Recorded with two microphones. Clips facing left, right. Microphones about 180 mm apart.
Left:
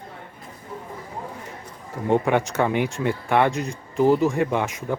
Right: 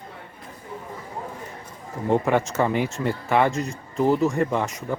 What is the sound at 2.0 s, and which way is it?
Speech, centre (ahead or behind).